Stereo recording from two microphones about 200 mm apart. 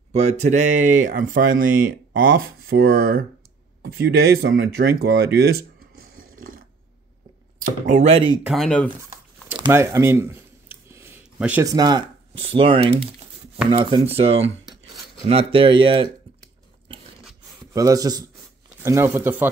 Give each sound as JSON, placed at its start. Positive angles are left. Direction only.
{"t": 0.1, "sound": "speech", "side_deg": -35}
{"t": 5.0, "sound": "a sound", "side_deg": -50}
{"t": 7.5, "sound": "speech", "side_deg": -45}
{"t": 8.5, "sound": "speech", "side_deg": 0}
{"t": 9.6, "sound": "a sound", "side_deg": -15}
{"t": 11.6, "sound": "speech", "side_deg": -20}
{"t": 17.7, "sound": "speech", "side_deg": -15}